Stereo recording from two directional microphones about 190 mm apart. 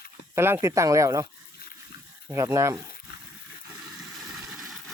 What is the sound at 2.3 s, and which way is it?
Speech, 15° right (ahead or behind).